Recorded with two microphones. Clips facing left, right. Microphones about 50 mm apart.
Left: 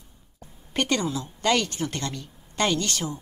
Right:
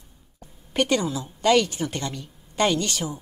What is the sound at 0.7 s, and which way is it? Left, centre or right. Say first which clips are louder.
A woman's voice: right 2 dB; centre.